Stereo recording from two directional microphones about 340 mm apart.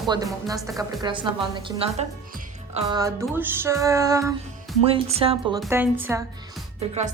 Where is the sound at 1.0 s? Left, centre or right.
Centre.